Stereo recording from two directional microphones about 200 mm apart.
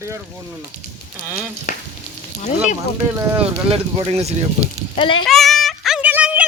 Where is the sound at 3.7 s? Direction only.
30° right (ahead or behind).